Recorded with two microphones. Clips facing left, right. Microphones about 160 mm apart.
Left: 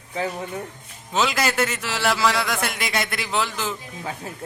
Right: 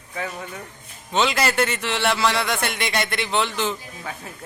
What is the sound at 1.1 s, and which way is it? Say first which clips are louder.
Speech: right 1 dB; centre (ahead or behind).